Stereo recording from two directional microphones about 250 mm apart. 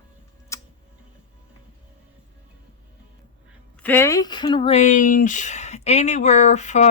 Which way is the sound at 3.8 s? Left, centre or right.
Centre.